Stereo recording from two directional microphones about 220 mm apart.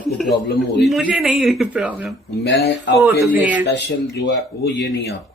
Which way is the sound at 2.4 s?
50° left (ahead or behind).